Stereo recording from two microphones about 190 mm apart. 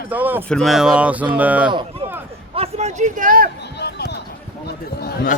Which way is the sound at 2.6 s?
35° right (ahead or behind).